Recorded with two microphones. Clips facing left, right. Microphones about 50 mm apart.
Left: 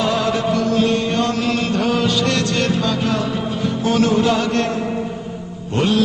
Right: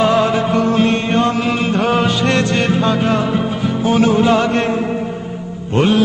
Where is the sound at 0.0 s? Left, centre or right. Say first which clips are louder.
Right 5 dB; right.